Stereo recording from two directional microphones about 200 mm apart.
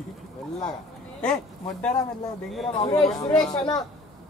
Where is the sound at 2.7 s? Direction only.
25° left (ahead or behind).